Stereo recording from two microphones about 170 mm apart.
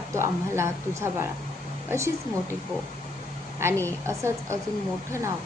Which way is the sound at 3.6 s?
15° right (ahead or behind).